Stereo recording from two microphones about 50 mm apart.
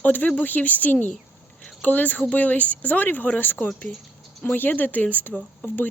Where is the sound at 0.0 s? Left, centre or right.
Left.